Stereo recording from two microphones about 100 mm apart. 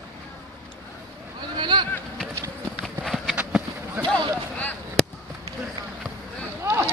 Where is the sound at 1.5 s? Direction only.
50° right (ahead or behind).